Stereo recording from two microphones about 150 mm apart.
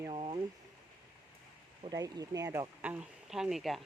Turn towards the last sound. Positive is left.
turn(degrees=0)  # may be behind; listen again after turning